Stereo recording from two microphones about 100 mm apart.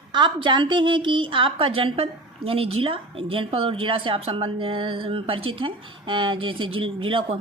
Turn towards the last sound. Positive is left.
turn(degrees=-60)  # may be behind; listen again after turning